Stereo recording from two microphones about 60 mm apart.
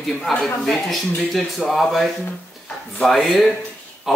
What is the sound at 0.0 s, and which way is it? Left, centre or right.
Speech, centre.